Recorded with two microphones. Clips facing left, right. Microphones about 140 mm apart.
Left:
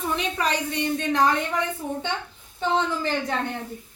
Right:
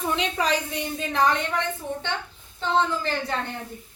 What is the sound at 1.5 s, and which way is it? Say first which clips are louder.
A woman's voice: left 1 dB; 10° left (ahead or behind).